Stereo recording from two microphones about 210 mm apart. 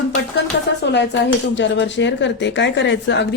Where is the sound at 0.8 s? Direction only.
55° left (ahead or behind).